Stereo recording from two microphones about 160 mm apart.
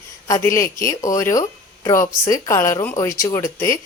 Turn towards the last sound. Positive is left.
turn(degrees=20)  # may be behind; listen again after turning